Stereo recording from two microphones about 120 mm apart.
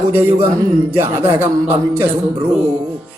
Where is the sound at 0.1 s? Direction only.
20° right (ahead or behind).